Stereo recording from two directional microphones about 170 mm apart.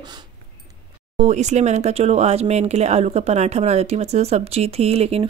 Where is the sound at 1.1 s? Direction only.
40° right (ahead or behind).